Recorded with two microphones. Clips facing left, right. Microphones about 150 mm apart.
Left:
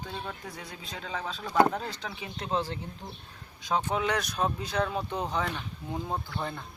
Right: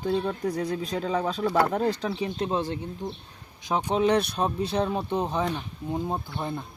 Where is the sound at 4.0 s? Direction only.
30° right (ahead or behind).